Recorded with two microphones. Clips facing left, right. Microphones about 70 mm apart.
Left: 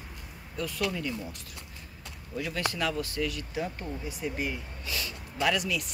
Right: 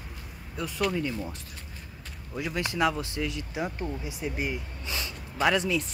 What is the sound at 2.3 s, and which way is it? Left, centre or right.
Speech, centre.